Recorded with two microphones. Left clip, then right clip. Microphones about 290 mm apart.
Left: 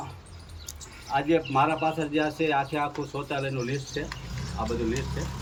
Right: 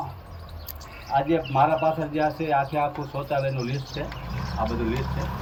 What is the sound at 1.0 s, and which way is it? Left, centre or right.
Speech, centre.